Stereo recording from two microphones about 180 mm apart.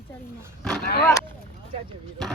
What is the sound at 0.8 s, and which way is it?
Speech, 60° left (ahead or behind).